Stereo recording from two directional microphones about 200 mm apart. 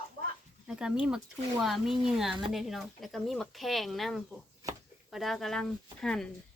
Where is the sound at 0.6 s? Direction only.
Centre (ahead or behind).